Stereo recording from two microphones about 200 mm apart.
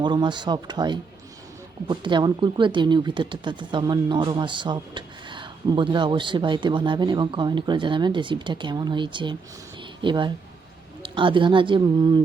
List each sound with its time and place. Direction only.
0.0 s speech: 20° right (ahead or behind)